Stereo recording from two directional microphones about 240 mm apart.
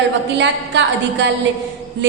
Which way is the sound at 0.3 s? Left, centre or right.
Right.